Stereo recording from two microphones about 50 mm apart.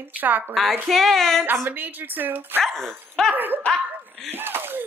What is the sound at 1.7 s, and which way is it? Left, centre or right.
Speech, right.